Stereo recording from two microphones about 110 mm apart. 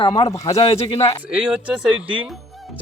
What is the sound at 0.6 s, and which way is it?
Speech, 60° left (ahead or behind).